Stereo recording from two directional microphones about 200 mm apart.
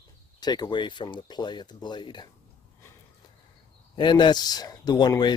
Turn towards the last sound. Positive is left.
turn(degrees=20)  # may be behind; listen again after turning